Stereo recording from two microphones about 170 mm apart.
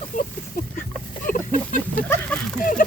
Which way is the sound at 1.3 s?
50° left (ahead or behind).